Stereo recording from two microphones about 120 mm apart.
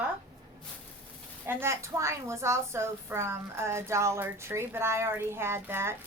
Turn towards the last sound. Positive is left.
turn(degrees=-20)  # may be behind; listen again after turning